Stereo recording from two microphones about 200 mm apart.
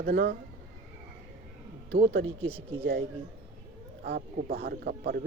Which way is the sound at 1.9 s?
55° right (ahead or behind).